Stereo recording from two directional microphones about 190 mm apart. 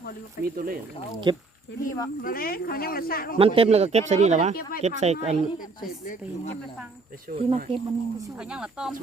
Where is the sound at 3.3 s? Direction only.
30° right (ahead or behind).